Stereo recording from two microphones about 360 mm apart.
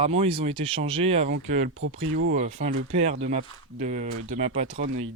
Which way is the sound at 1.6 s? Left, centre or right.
Right.